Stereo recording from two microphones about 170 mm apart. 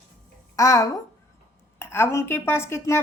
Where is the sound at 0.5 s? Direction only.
20° left (ahead or behind).